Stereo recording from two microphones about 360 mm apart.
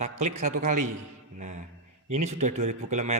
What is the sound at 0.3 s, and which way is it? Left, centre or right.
Speech, centre.